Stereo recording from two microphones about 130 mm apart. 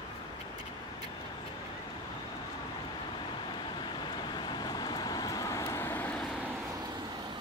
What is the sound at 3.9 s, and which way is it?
Vehicle, 35° left (ahead or behind).